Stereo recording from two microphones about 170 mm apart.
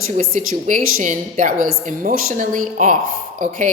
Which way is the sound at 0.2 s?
50° right (ahead or behind).